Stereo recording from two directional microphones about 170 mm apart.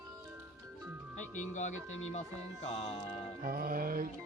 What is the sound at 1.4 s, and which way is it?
Speech, 45° left (ahead or behind).